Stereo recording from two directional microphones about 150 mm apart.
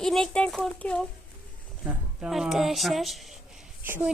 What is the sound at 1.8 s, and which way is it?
A child's voice, 5° right (ahead or behind).